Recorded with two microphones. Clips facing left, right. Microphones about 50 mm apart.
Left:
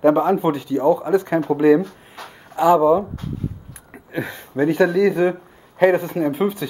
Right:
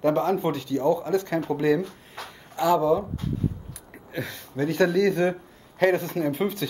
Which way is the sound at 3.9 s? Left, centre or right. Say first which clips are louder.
Left 6 dB; left.